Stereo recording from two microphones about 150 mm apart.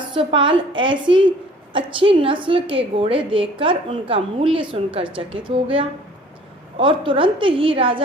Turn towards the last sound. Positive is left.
turn(degrees=-35)  # may be behind; listen again after turning